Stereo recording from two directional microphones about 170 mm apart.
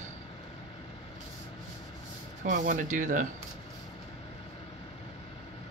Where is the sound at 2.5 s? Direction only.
50° right (ahead or behind).